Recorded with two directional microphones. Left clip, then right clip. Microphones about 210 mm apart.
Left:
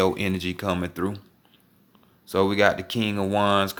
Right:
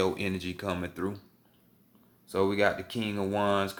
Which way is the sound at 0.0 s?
40° left (ahead or behind).